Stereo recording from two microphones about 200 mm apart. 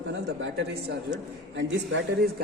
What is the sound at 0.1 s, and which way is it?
A man's voice, 60° right (ahead or behind).